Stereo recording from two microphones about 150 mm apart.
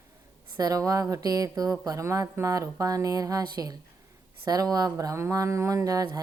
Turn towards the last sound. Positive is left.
turn(degrees=-25)  # may be behind; listen again after turning